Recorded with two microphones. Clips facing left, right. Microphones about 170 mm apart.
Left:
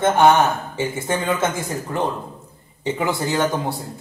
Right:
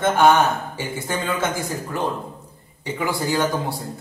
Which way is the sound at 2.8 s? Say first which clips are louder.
Left 2 dB; 20° left (ahead or behind).